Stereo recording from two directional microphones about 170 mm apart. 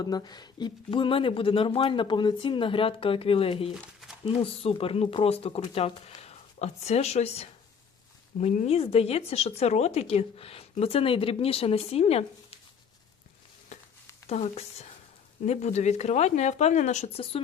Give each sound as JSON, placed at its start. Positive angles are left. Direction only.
{"t": 0.0, "sound": "speech", "side_deg": 25}
{"t": 13.7, "sound": "a sound", "side_deg": 45}
{"t": 14.3, "sound": "speech", "side_deg": 40}